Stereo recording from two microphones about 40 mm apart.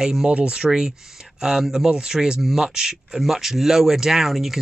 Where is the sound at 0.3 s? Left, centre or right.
Right.